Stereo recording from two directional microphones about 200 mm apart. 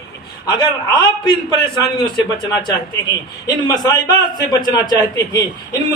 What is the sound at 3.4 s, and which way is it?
A man's voice, 20° left (ahead or behind).